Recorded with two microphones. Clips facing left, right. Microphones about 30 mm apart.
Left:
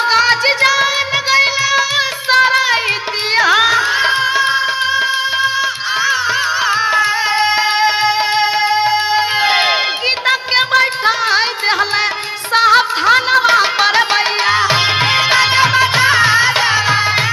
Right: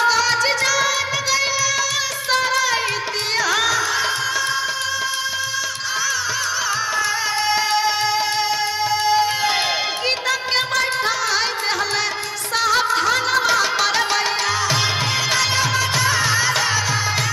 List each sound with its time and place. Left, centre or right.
0.1 s music: left
6.7 s music: left
12.5 s music: left